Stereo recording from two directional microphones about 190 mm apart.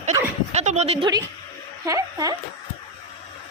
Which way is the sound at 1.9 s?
20° right (ahead or behind).